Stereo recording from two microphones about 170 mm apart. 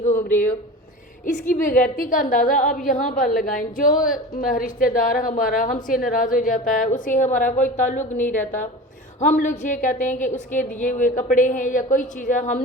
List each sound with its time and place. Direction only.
0.0 s speech: 45° left (ahead or behind)
1.5 s a woman's voice: 50° left (ahead or behind)